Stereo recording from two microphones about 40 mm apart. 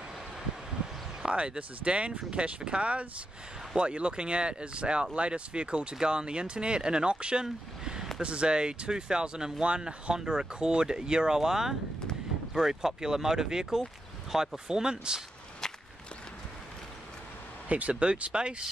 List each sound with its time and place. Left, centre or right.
1.2 s speech: right
7.4 s a sound: centre
8.2 s speech: right
17.6 s speech: right